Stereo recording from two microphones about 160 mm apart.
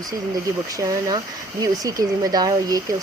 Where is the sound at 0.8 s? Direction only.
20° right (ahead or behind).